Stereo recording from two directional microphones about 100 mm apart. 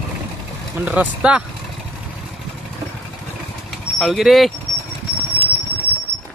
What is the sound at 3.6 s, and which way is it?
Vehicle, centre (ahead or behind).